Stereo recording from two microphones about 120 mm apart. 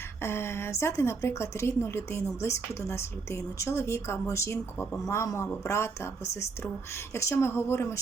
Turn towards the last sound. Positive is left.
turn(degrees=20)  # may be behind; listen again after turning